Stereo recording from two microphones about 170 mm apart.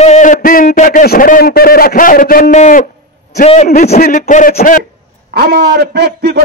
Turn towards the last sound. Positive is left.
turn(degrees=-75)  # may be behind; listen again after turning